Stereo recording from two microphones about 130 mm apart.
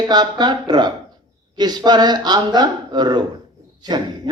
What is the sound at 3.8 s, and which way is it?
Owl, 30° right (ahead or behind).